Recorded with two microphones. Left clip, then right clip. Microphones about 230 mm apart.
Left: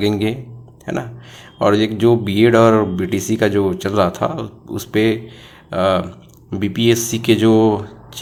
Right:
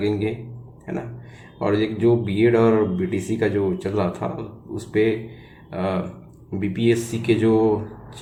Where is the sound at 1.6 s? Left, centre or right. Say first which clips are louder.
Left 7 dB; left.